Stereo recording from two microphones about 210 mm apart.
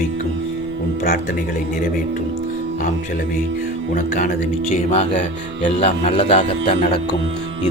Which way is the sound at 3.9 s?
40° left (ahead or behind).